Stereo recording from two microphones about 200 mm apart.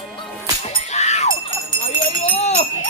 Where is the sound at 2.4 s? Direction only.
35° left (ahead or behind).